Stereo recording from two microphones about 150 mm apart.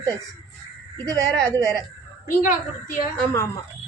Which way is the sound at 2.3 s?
65° left (ahead or behind).